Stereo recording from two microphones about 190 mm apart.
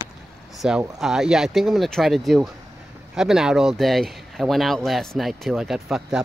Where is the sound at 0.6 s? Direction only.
5° right (ahead or behind).